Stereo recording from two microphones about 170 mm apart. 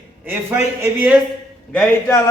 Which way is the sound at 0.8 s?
10° right (ahead or behind).